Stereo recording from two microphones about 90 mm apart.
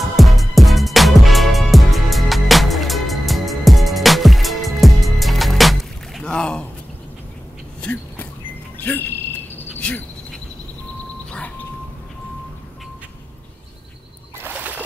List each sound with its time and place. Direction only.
0.0 s music: centre (ahead or behind)
6.2 s a sound: 10° left (ahead or behind)
7.8 s vehicle: 15° left (ahead or behind)
8.7 s cricket: 20° left (ahead or behind)
9.8 s insect: 15° left (ahead or behind)
11.2 s vehicle: 10° left (ahead or behind)
14.4 s a sound: 15° right (ahead or behind)